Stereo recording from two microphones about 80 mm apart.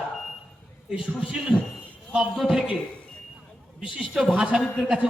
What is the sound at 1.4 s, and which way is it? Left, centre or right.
A man's voice, centre.